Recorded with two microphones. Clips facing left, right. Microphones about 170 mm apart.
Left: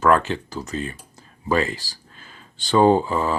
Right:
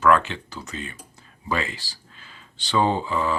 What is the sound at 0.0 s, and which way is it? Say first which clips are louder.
Speech: left 1 dB; 40° left (ahead or behind).